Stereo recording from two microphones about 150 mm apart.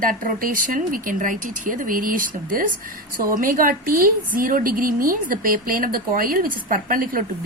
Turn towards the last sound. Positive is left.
turn(degrees=-70)  # may be behind; listen again after turning